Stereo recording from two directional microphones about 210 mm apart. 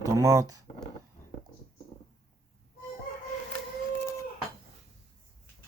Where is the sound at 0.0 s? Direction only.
15° right (ahead or behind).